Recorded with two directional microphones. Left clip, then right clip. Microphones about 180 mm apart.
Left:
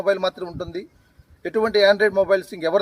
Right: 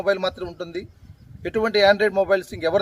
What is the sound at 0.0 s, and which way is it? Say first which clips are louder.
Speech: left 1 dB; 15° right (ahead or behind).